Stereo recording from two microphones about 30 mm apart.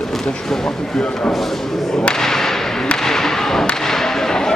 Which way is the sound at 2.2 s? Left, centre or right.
Centre.